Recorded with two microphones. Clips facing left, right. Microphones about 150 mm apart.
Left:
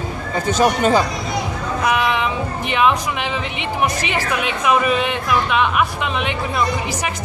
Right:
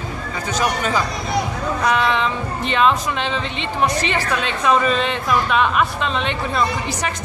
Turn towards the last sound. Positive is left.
turn(degrees=10)  # may be behind; listen again after turning